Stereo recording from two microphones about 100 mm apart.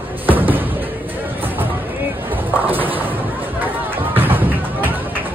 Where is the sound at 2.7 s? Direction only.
20° right (ahead or behind).